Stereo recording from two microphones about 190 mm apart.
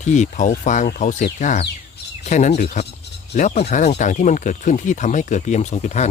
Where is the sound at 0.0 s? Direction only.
40° left (ahead or behind).